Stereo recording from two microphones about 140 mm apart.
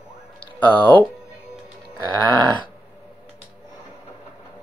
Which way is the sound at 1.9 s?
35° right (ahead or behind).